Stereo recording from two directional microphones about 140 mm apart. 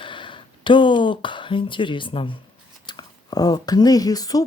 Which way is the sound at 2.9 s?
30° left (ahead or behind).